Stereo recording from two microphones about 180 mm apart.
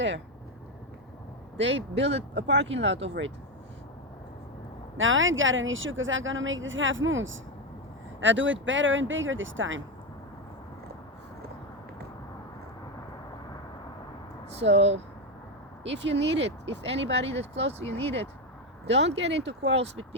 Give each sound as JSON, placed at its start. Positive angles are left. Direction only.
{"t": 1.5, "sound": "speech", "side_deg": -85}
{"t": 4.9, "sound": "speech", "side_deg": -90}
{"t": 14.7, "sound": "speech", "side_deg": -35}
{"t": 15.8, "sound": "speech", "side_deg": -80}
{"t": 17.4, "sound": "speech", "side_deg": -35}
{"t": 18.9, "sound": "speech", "side_deg": -80}